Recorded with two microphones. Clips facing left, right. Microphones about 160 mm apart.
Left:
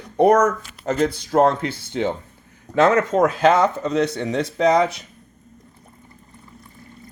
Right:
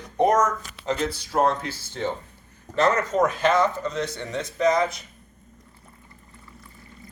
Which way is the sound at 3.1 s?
90° left.